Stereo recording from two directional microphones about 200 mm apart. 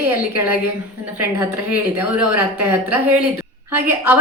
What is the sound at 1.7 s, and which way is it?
Speech, 5° right (ahead or behind).